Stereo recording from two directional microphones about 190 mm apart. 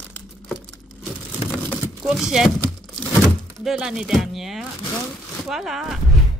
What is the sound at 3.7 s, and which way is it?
Speech, 5° right (ahead or behind).